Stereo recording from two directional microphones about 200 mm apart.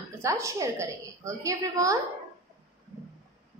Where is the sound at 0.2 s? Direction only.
15° right (ahead or behind).